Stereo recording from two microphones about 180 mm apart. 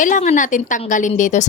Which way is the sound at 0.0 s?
45° left (ahead or behind).